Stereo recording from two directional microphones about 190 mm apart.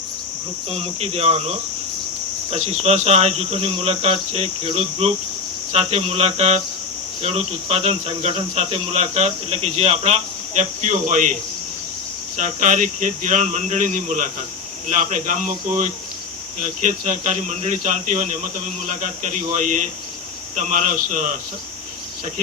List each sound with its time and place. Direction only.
0.7 s speech: 35° right (ahead or behind)
12.4 s speech: 40° right (ahead or behind)